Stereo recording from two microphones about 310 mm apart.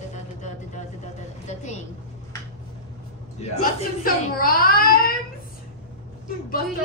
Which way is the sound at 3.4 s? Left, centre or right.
Left.